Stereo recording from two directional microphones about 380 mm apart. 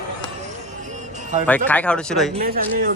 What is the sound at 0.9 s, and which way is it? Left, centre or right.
Music, centre.